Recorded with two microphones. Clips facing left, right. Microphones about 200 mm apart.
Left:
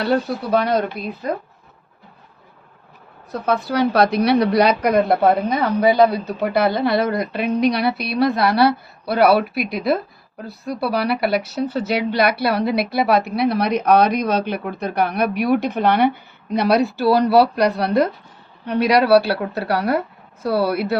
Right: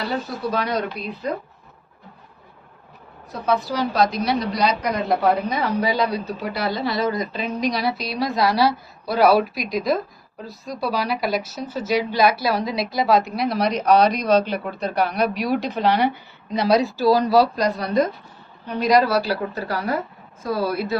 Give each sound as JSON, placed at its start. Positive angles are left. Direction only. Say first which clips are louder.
{"t": 0.0, "sound": "speech", "louder": "left 6 dB", "side_deg": 65}
{"t": 3.4, "sound": "speech", "louder": "left 3 dB", "side_deg": 60}